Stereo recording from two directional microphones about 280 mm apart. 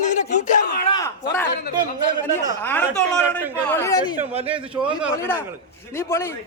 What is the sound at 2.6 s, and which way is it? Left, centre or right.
Speech, centre.